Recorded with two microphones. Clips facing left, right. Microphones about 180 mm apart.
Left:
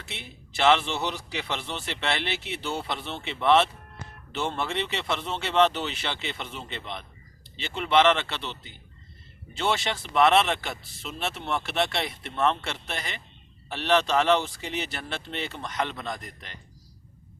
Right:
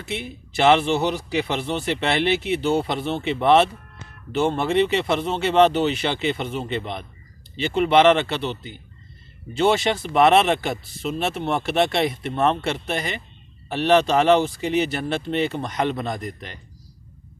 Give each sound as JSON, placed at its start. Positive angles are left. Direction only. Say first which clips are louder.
{"t": 0.0, "sound": "speech", "louder": "right 11 dB", "side_deg": -15}